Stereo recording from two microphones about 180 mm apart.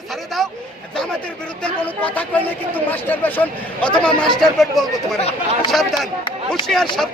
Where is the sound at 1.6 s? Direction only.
10° left (ahead or behind).